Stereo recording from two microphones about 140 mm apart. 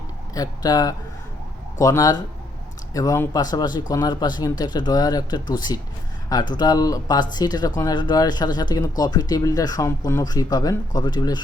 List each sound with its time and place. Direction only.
0.3 s speech: 30° left (ahead or behind)